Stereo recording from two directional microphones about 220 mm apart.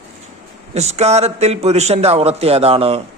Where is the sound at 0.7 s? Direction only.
30° right (ahead or behind).